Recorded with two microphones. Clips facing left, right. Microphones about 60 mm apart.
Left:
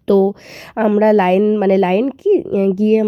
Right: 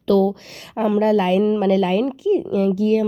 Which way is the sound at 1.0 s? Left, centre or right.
Left.